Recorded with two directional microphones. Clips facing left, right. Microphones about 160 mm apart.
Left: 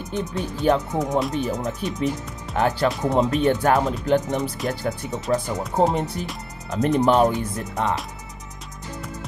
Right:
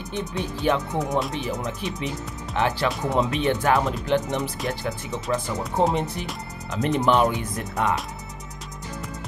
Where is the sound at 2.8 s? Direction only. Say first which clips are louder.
Left 3 dB; 40° left (ahead or behind).